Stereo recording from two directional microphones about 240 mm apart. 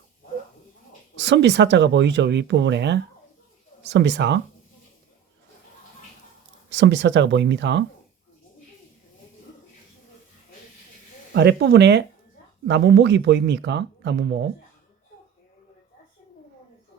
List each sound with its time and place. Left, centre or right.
1.1 s speech: right
6.7 s speech: right
11.3 s speech: right